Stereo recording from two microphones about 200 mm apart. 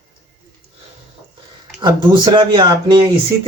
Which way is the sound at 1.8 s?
25° right (ahead or behind).